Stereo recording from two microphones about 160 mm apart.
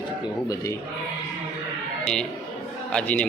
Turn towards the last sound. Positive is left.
turn(degrees=5)  # may be behind; listen again after turning